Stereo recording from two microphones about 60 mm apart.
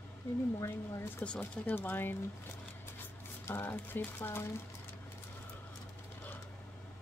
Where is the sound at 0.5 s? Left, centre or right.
Left.